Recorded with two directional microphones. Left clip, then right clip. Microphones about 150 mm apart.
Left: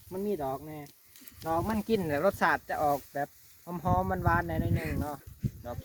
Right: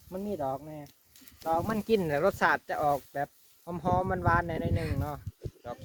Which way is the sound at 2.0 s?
90° right.